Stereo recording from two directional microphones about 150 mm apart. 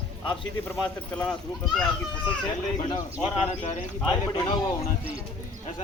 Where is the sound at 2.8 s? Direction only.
30° left (ahead or behind).